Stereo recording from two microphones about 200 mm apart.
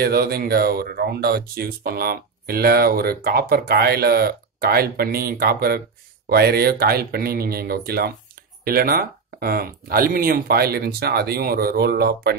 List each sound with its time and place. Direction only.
0.0 s speech: 50° right (ahead or behind)